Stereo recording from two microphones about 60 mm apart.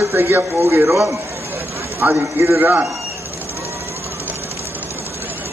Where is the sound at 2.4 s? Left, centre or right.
Right.